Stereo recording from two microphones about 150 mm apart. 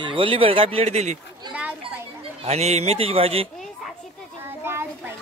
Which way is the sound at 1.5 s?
10° right (ahead or behind).